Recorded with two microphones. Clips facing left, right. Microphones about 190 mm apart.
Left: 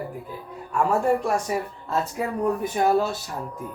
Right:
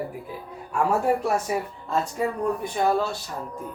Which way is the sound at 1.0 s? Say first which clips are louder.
Left 1 dB; 5° right (ahead or behind).